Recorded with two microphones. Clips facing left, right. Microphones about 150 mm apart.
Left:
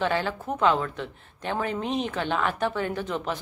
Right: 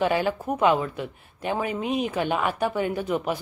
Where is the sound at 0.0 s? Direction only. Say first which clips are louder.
Right 3 dB; 10° right (ahead or behind).